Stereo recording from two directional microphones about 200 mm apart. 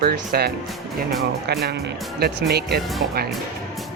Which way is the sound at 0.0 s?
50° right (ahead or behind).